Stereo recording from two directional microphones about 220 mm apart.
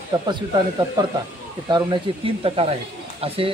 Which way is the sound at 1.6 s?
20° right (ahead or behind).